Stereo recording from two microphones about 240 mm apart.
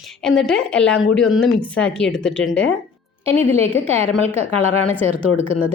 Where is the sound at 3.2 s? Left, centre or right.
Right.